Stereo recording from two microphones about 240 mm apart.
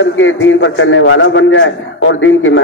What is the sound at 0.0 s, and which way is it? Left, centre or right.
A man's voice, left.